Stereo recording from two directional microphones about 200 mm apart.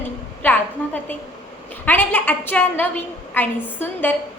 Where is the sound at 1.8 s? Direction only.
10° left (ahead or behind).